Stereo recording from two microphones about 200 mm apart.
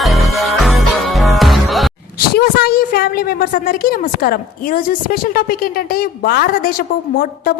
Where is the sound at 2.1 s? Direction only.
50° left (ahead or behind).